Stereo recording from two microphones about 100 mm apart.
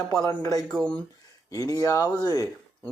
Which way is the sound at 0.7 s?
10° left (ahead or behind).